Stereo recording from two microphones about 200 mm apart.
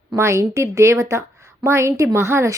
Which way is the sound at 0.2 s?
15° right (ahead or behind).